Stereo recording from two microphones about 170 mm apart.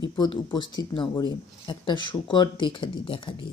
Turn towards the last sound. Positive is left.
turn(degrees=30)  # may be behind; listen again after turning